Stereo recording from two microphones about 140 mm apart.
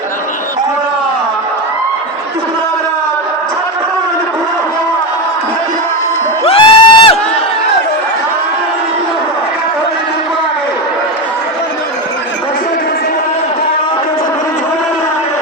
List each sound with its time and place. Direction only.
6.4 s music: 40° left (ahead or behind)